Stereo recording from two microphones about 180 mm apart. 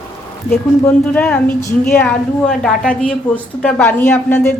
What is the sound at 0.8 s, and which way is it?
A woman's voice, 10° left (ahead or behind).